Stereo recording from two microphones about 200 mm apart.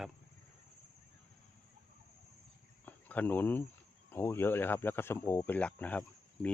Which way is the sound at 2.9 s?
10° left (ahead or behind).